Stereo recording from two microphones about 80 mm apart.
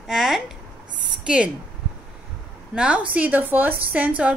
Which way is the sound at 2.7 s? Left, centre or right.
Centre.